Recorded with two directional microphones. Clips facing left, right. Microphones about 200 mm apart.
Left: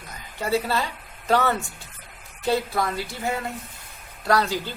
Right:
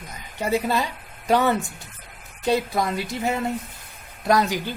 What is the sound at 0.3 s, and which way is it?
Speech, 15° right (ahead or behind).